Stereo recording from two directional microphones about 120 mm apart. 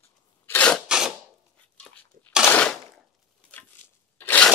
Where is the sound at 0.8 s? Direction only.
5° right (ahead or behind).